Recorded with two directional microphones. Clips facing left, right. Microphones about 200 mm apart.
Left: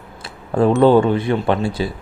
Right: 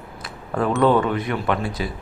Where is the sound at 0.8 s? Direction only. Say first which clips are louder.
Left 4 dB; 30° left (ahead or behind).